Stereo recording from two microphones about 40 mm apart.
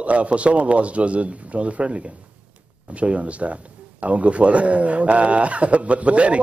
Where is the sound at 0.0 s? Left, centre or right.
Right.